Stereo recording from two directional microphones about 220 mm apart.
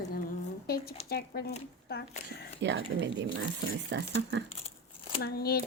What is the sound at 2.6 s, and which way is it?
Speech, 55° right (ahead or behind).